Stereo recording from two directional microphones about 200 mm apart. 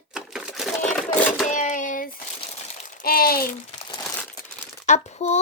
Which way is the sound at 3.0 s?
50° left (ahead or behind).